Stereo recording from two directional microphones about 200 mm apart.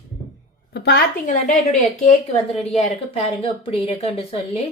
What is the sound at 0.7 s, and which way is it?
Speech, 50° left (ahead or behind).